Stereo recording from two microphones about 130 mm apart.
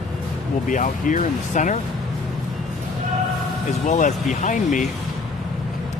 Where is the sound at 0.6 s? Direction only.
80° left.